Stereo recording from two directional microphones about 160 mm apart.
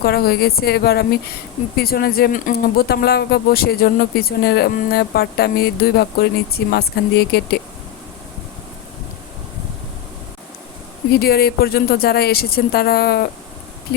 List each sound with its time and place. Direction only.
0.0 s speech: 75° left (ahead or behind); by 7.6 s 90° left
11.2 s speech: 80° left